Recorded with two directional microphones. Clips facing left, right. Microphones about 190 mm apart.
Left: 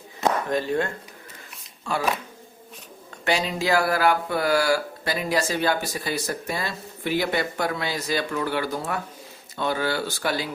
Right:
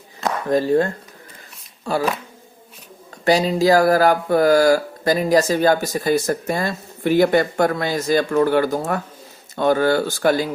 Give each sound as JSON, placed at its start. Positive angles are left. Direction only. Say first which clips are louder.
{"t": 0.5, "sound": "speech", "louder": "right 7 dB", "side_deg": -35}
{"t": 3.2, "sound": "speech", "louder": "right 8 dB", "side_deg": -40}